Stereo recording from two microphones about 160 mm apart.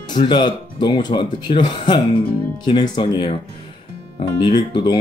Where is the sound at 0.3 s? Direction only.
30° left (ahead or behind).